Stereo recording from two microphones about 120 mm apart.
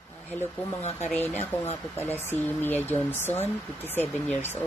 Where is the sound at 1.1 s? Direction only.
15° left (ahead or behind).